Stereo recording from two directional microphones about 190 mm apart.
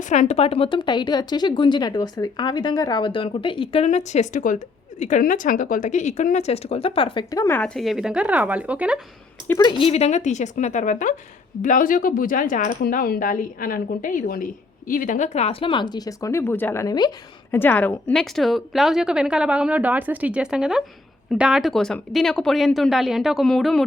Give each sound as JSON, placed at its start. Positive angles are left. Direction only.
{"t": 0.0, "sound": "speech", "side_deg": 40}
{"t": 9.5, "sound": "speech", "side_deg": 20}
{"t": 17.5, "sound": "a woman's voice", "side_deg": 10}